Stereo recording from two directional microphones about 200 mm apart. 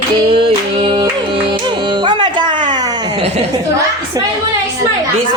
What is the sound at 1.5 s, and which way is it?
Music, 20° right (ahead or behind).